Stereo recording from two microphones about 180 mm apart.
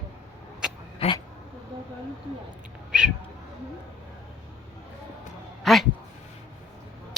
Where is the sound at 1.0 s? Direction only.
35° left (ahead or behind).